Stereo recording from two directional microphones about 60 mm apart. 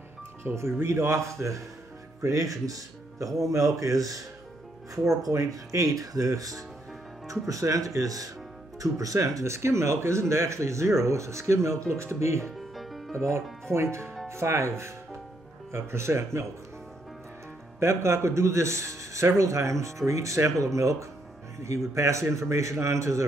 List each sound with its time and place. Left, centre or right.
0.4 s speech: right
2.2 s speech: right
12.4 s music: centre
13.1 s speech: right
17.7 s speech: right